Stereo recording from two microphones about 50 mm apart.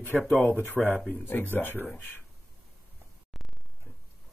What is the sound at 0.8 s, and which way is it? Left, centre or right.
Speech, right.